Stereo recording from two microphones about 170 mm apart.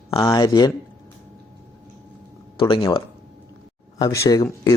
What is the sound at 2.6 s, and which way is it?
A man's voice, 25° left (ahead or behind).